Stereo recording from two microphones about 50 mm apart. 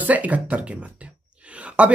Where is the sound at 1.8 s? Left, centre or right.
Right.